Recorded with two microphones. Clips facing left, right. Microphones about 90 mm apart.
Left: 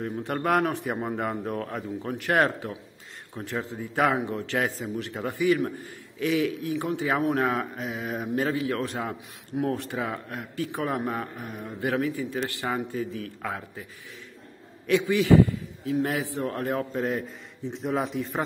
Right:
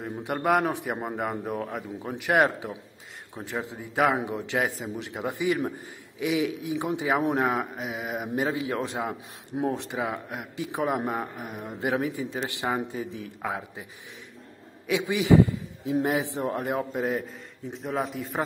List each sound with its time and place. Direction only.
0.0 s a man's voice: 10° right (ahead or behind)
14.9 s a man's voice: 15° right (ahead or behind)